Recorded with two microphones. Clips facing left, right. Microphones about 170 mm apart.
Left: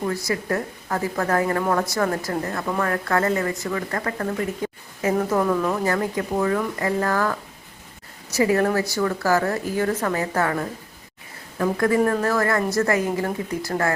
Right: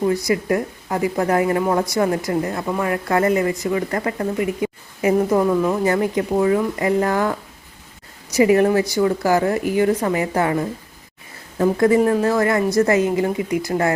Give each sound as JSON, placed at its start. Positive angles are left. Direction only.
{"t": 0.0, "sound": "a woman's voice", "side_deg": -20}